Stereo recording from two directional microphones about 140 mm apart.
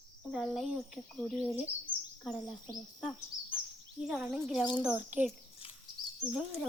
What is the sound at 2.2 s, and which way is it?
A child's voice, centre (ahead or behind).